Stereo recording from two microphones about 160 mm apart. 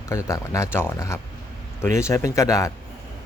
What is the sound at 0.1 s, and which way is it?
Speech, 20° left (ahead or behind).